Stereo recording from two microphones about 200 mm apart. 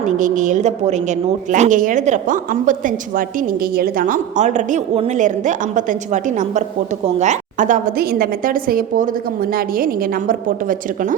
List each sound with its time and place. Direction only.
0.2 s a woman's voice: 40° right (ahead or behind)
7.2 s a woman's voice: 40° right (ahead or behind)